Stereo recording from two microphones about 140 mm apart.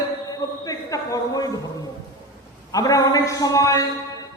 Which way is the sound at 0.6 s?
25° left (ahead or behind).